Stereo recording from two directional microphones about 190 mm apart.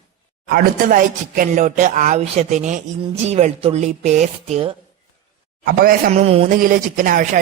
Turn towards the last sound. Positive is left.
turn(degrees=-40)  # may be behind; listen again after turning